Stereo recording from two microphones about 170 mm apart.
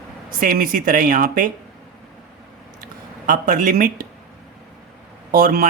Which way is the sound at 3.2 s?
55° right (ahead or behind).